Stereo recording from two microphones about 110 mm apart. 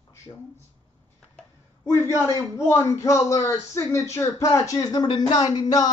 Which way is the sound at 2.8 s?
25° left (ahead or behind).